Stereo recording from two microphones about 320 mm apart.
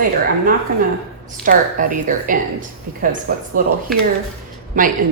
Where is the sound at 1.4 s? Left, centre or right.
Right.